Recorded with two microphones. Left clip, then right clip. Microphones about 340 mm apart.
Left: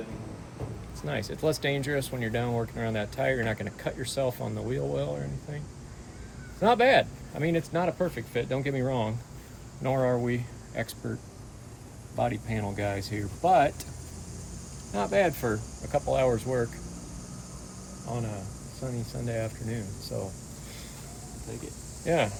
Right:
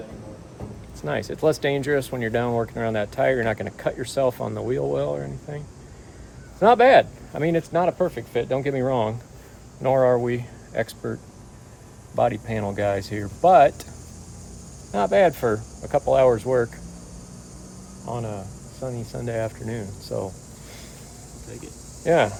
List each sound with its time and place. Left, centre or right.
1.0 s speech: centre
6.6 s speech: centre
12.1 s speech: centre
14.9 s speech: right
18.1 s speech: centre
22.0 s speech: centre